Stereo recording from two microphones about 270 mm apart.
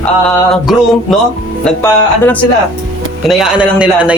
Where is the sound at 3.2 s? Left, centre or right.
Centre.